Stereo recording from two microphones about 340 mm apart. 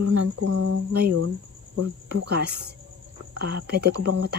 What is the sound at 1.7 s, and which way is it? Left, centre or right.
Speech, right.